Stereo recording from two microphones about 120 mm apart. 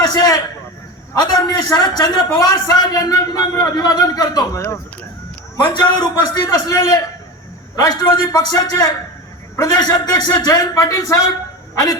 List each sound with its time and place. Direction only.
0.0 s a sound: 35° left (ahead or behind)
1.1 s a man's voice: 35° left (ahead or behind)
5.6 s a man's voice: 40° left (ahead or behind)
11.7 s honk: 25° left (ahead or behind)